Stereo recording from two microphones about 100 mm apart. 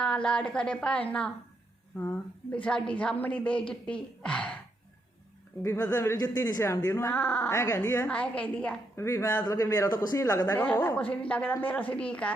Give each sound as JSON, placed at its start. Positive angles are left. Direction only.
{"t": 0.0, "sound": "a woman's voice", "side_deg": 10}
{"t": 2.5, "sound": "a woman's voice", "side_deg": 10}
{"t": 5.6, "sound": "a woman's voice", "side_deg": 30}
{"t": 8.0, "sound": "a woman's voice", "side_deg": 15}
{"t": 9.0, "sound": "a man's voice", "side_deg": 30}
{"t": 10.6, "sound": "a woman's voice", "side_deg": 20}